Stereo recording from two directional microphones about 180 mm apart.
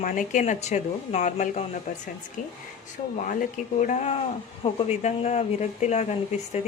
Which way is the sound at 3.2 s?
45° left (ahead or behind).